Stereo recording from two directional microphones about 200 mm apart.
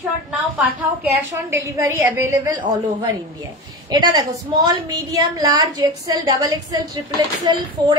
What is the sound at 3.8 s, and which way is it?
A woman's voice, 20° right (ahead or behind).